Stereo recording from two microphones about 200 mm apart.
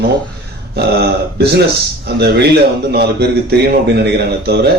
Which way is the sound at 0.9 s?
55° right (ahead or behind).